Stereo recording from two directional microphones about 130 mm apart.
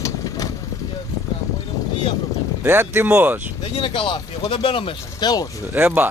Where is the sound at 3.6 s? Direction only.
45° left (ahead or behind).